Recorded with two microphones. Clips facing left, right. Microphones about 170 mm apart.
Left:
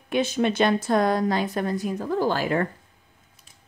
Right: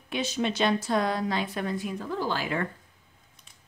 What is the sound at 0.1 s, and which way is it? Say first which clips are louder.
A woman's voice: left 6 dB; 55° left (ahead or behind).